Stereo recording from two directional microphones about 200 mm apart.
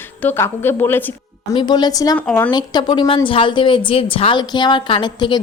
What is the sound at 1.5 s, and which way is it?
Speech, 20° left (ahead or behind).